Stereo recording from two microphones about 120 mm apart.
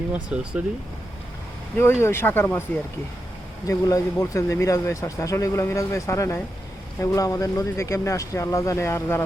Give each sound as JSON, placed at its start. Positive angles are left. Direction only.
{"t": 0.1, "sound": "speech", "side_deg": -10}
{"t": 1.8, "sound": "speech", "side_deg": 20}
{"t": 3.7, "sound": "speech", "side_deg": 25}